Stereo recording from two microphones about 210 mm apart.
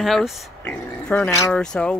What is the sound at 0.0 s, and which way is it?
Speech, centre (ahead or behind).